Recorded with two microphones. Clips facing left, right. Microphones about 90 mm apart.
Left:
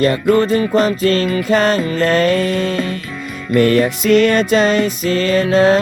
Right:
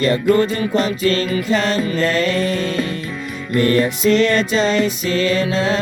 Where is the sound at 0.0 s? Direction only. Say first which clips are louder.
Left 2 dB; 40° left (ahead or behind).